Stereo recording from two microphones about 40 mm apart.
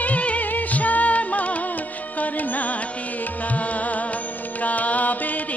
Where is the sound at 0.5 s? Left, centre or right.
Left.